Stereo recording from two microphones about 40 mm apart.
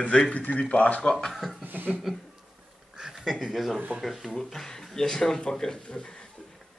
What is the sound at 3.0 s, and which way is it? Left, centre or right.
Speech, centre.